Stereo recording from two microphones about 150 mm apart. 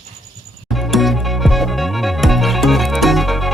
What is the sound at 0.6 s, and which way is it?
Music, centre (ahead or behind).